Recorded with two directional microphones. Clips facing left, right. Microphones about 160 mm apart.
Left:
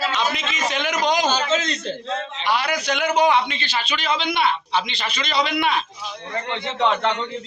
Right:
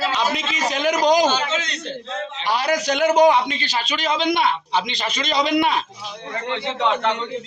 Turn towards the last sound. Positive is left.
turn(degrees=-15)  # may be behind; listen again after turning